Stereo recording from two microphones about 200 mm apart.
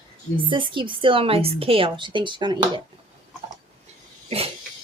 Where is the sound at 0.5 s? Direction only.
25° right (ahead or behind).